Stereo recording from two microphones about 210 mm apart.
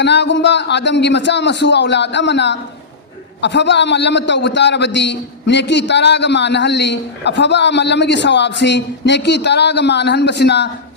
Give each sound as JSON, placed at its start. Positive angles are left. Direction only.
{"t": 0.0, "sound": "a man's voice", "side_deg": 55}